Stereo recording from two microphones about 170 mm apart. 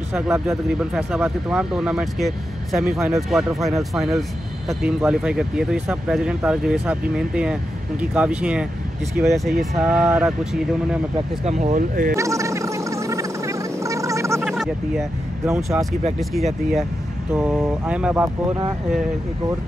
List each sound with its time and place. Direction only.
0.5 s speech: 5° right (ahead or behind)
11.4 s speech: 45° right (ahead or behind)
12.2 s gargling: 20° right (ahead or behind)
14.4 s a sound: centre (ahead or behind)
15.4 s speech: 15° right (ahead or behind)
16.2 s speech: centre (ahead or behind)